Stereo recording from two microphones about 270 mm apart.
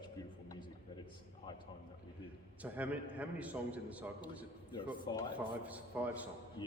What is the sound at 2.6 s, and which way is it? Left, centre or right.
A man's voice, centre.